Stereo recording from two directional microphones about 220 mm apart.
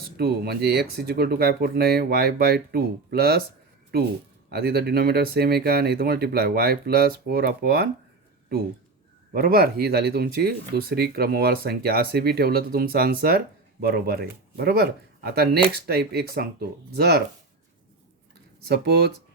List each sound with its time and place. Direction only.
0.2 s speech: 45° right (ahead or behind)
4.4 s speech: 45° right (ahead or behind)
9.3 s speech: 40° right (ahead or behind)
18.7 s speech: 45° right (ahead or behind)